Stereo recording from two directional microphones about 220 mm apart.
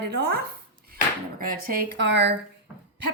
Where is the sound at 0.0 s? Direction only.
45° right (ahead or behind).